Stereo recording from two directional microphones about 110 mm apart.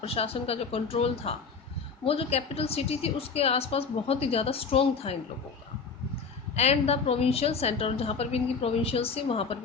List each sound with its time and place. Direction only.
0.0 s a woman's voice: 65° left (ahead or behind)
6.6 s a woman's voice: 70° left (ahead or behind)